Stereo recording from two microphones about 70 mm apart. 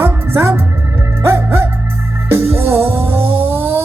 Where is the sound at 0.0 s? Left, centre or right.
Right.